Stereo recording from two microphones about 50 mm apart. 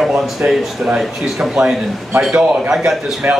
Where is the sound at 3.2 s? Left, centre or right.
Right.